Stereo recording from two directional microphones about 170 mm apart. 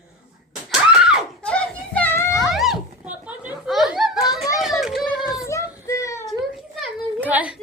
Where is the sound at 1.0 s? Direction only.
5° right (ahead or behind).